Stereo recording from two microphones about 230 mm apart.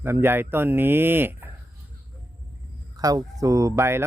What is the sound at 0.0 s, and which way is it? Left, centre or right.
Speech, centre.